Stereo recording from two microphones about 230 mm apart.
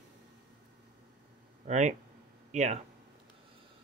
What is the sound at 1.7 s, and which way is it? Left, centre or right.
Speech, right.